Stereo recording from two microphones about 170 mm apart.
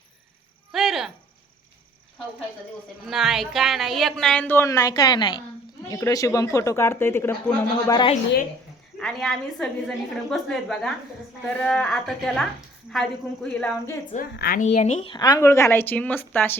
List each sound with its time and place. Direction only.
0.7 s cricket: centre (ahead or behind)
3.0 s a woman's voice: centre (ahead or behind); by 8.1 s 25° left (ahead or behind)
9.0 s a woman's voice: centre (ahead or behind)
14.3 s a woman's voice: 60° left (ahead or behind)
14.6 s speech: 45° left (ahead or behind)
15.1 s speech: 20° left (ahead or behind)